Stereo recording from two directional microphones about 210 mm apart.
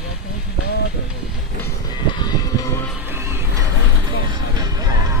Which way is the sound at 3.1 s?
10° right (ahead or behind).